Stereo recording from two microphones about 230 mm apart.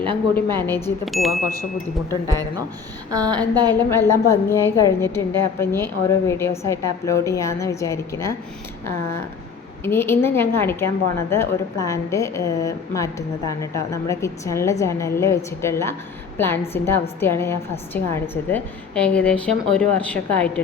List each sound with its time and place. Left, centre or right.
1.0 s a woman's voice: centre
2.2 s a woman's voice: centre
3.8 s a woman's voice: centre
9.8 s a woman's voice: centre